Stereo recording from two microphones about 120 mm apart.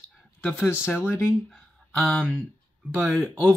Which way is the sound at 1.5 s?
5° left (ahead or behind).